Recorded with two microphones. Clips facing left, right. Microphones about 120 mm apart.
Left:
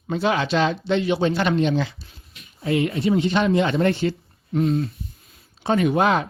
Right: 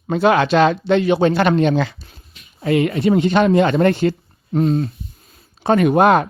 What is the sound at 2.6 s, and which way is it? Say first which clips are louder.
Speech: right 5 dB; 70° right (ahead or behind).